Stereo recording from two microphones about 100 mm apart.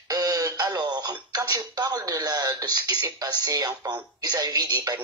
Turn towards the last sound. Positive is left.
turn(degrees=-40)  # may be behind; listen again after turning